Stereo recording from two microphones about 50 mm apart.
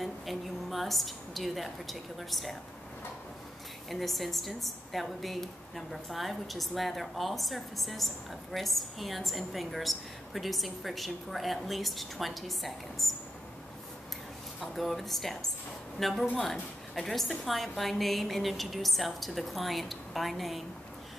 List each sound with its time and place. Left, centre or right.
0.0 s a woman's voice: centre
3.9 s a woman's voice: centre
14.6 s a woman's voice: centre